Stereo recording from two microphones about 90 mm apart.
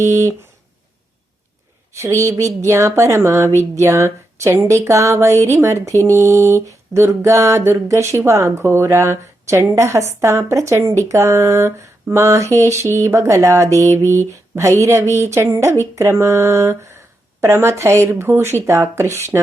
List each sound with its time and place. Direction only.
0.0 s speech: 30° right (ahead or behind)
2.0 s speech: 35° right (ahead or behind)